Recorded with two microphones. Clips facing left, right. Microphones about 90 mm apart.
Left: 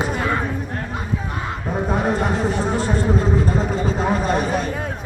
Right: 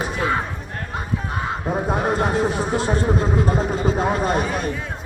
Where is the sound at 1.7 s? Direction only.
10° right (ahead or behind).